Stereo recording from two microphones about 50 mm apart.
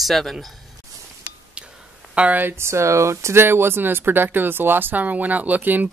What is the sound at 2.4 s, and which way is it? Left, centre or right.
Speech, right.